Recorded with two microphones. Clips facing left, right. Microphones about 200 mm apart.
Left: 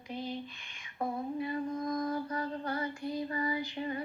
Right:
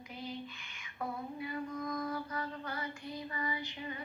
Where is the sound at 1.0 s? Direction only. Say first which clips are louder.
Left 6 dB; 35° left (ahead or behind).